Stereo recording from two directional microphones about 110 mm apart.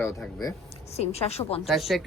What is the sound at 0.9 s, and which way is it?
Speech, 70° left (ahead or behind).